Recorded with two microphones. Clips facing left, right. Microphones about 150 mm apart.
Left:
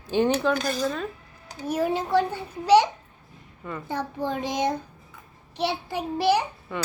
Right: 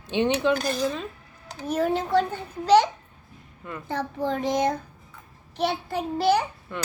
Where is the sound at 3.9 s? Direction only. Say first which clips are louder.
Right 2 dB; 10° left (ahead or behind).